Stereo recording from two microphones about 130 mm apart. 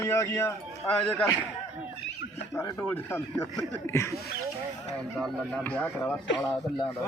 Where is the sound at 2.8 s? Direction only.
15° left (ahead or behind).